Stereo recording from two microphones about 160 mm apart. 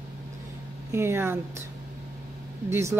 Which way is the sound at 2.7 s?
15° right (ahead or behind).